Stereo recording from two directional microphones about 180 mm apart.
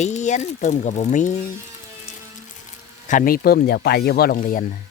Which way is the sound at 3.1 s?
50° left (ahead or behind).